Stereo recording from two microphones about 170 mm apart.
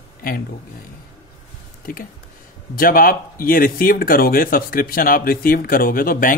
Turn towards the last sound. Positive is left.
turn(degrees=55)  # may be behind; listen again after turning